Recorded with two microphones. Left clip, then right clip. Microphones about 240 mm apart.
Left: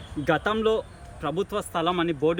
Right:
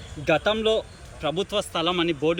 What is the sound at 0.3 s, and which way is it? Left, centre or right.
Speech, centre.